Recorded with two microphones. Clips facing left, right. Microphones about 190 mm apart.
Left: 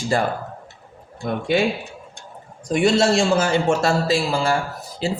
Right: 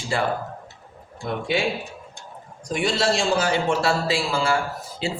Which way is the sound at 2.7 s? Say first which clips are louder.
Left 6 dB; 50° left (ahead or behind).